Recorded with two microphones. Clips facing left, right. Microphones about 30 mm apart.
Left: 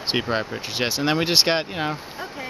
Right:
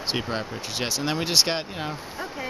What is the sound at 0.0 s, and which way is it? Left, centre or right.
Speech, centre.